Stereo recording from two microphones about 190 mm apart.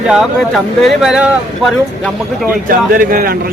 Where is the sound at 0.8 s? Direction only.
5° right (ahead or behind).